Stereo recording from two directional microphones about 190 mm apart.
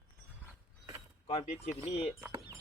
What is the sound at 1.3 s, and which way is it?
Speech, 30° left (ahead or behind).